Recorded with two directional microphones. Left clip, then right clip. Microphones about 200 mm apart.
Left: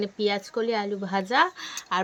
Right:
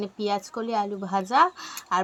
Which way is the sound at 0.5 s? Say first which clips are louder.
Left 4 dB; 15° left (ahead or behind).